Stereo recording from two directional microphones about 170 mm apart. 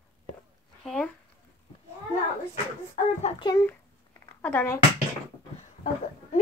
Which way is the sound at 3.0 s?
45° left (ahead or behind).